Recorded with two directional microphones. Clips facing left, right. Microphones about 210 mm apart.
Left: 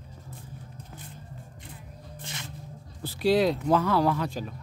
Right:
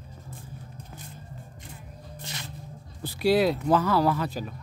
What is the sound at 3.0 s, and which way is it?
Speech, 10° right (ahead or behind).